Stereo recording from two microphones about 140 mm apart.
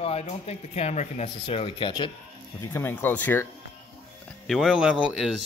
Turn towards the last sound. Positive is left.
turn(degrees=0)  # may be behind; listen again after turning